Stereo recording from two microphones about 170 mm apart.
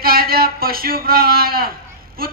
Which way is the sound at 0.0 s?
60° right (ahead or behind).